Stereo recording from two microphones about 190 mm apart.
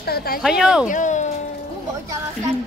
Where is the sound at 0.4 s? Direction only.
5° right (ahead or behind).